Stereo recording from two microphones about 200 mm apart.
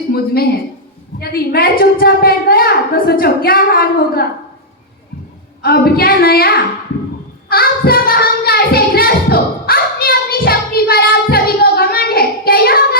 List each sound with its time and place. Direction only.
0.1 s a woman's voice: 50° left (ahead or behind)
5.6 s a woman's voice: 50° left (ahead or behind)
7.4 s a sound: 50° left (ahead or behind)